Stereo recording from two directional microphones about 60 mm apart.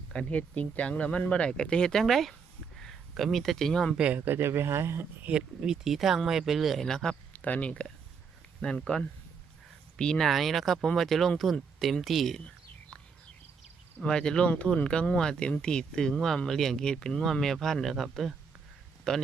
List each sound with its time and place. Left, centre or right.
0.1 s speech: centre
2.7 s a sound: centre
3.2 s speech: centre
3.9 s speech: right
4.3 s speech: right
5.3 s speech: right
5.6 s speech: centre
6.8 s speech: centre
7.3 s speech: left
10.0 s speech: centre
10.2 s speech: centre
14.0 s speech: centre
19.1 s speech: centre